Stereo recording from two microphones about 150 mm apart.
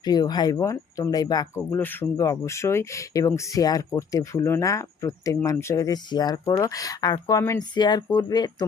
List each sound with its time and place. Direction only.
0.0 s speech: 30° left (ahead or behind)